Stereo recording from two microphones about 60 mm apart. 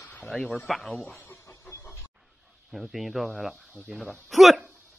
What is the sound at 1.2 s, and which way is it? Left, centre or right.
Chicken, left.